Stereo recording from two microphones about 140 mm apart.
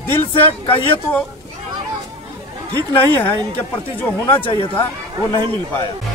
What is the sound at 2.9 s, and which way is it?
Speech, 15° left (ahead or behind).